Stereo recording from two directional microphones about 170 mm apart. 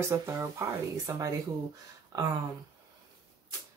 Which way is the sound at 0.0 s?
15° right (ahead or behind).